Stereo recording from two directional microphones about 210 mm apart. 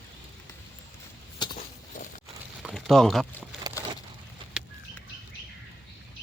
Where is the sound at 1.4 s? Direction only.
20° left (ahead or behind).